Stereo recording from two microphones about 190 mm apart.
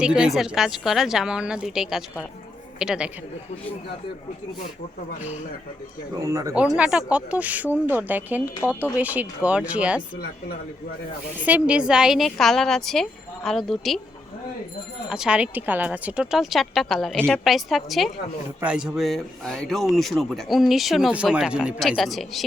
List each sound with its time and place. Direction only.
0.0 s speech: 5° right (ahead or behind)
6.2 s a woman's voice: 15° right (ahead or behind)
6.7 s a woman's voice: 5° right (ahead or behind)
11.4 s speech: 5° right (ahead or behind)
15.1 s speech: 5° right (ahead or behind)